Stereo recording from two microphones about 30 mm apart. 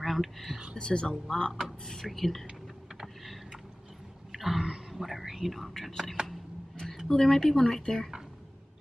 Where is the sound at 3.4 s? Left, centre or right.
Centre.